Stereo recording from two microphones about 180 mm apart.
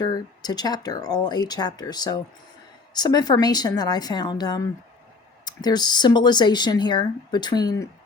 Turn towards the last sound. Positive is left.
turn(degrees=20)  # may be behind; listen again after turning